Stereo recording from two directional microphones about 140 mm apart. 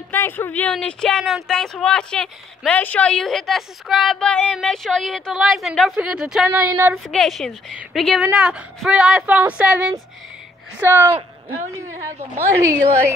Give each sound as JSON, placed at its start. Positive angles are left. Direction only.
{"t": 0.1, "sound": "speech", "side_deg": 15}
{"t": 6.7, "sound": "speech", "side_deg": -15}
{"t": 7.1, "sound": "a woman's voice", "side_deg": 0}